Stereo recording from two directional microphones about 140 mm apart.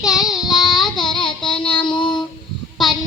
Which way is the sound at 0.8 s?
30° left (ahead or behind).